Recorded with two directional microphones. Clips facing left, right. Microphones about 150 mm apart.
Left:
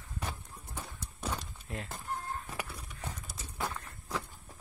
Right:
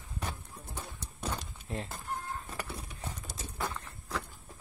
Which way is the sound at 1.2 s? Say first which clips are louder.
Even; centre (ahead or behind).